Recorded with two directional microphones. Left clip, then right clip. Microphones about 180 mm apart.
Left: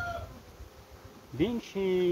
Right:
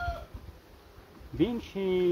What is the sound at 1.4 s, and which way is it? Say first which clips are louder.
Speech: right 1 dB; 20° right (ahead or behind).